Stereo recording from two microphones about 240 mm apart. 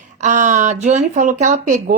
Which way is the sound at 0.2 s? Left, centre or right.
Right.